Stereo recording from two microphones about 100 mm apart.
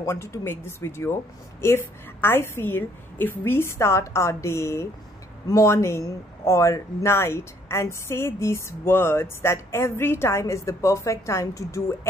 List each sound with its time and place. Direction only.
0.0 s speech: 30° left (ahead or behind)